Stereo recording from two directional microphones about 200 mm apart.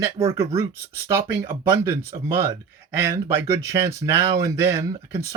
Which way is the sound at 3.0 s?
15° right (ahead or behind).